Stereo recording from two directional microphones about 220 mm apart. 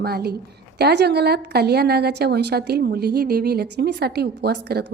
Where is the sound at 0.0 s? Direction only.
45° right (ahead or behind).